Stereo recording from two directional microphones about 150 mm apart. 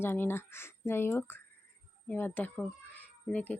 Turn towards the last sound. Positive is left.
turn(degrees=10)  # may be behind; listen again after turning